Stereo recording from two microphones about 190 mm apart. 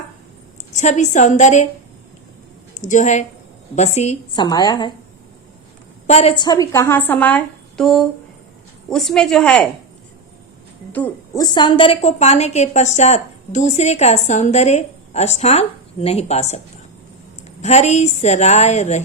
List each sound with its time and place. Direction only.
0.7 s a woman's voice: 40° left (ahead or behind)
2.8 s a woman's voice: 40° left (ahead or behind)
4.3 s a woman's voice: 20° left (ahead or behind)
6.1 s a woman's voice: 30° left (ahead or behind); by 9.7 s 5° left (ahead or behind)
11.3 s a woman's voice: 25° left (ahead or behind)
17.6 s a woman's voice: 35° left (ahead or behind)